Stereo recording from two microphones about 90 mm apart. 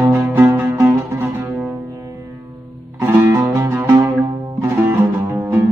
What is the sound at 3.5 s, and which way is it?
Music, 25° right (ahead or behind).